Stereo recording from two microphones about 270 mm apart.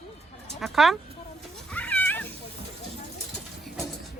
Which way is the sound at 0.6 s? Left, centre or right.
Centre.